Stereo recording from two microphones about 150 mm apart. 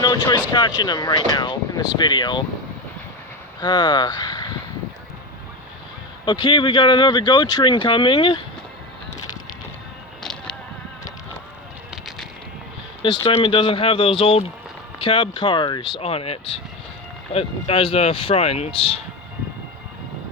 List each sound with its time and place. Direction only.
0.0 s vehicle: 30° left (ahead or behind)
0.5 s speech: 30° left (ahead or behind)
3.6 s speech: 30° left (ahead or behind)
6.2 s speech: 30° left (ahead or behind)
13.0 s speech: 35° left (ahead or behind)